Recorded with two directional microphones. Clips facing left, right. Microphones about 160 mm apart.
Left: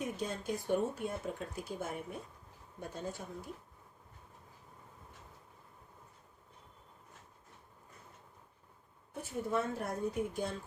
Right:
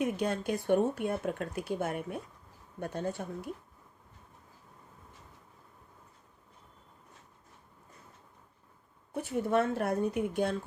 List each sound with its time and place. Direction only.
0.0 s a woman's voice: 70° right (ahead or behind)
9.1 s speech: 75° right (ahead or behind)